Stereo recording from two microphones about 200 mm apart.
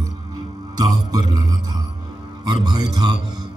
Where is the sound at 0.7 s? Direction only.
20° right (ahead or behind).